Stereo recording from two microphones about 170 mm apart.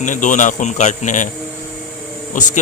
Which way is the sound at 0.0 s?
50° left (ahead or behind).